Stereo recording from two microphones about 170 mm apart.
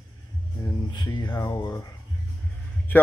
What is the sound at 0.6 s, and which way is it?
Speech, 25° left (ahead or behind).